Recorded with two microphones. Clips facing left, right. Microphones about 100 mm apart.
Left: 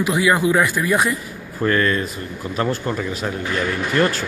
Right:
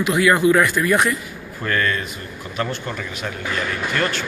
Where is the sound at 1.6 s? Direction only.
30° left (ahead or behind).